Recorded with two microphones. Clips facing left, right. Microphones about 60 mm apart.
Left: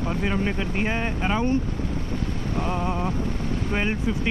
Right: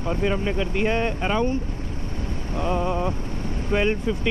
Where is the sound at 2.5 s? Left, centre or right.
Right.